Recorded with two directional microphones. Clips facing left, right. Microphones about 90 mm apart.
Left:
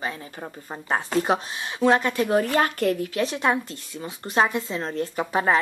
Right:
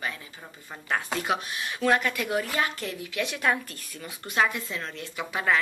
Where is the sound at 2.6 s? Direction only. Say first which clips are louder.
Left 8 dB; 45° left (ahead or behind).